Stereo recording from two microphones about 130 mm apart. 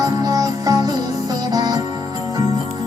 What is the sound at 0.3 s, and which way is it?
Music, 30° right (ahead or behind).